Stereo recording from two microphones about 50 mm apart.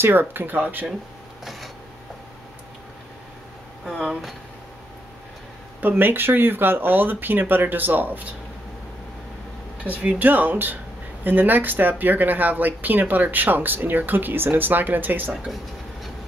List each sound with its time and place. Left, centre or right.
0.0 s speech: right
1.4 s a sound: centre
5.8 s speech: right
9.8 s speech: right